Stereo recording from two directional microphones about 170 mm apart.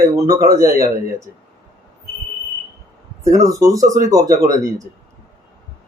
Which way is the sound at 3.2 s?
20° right (ahead or behind).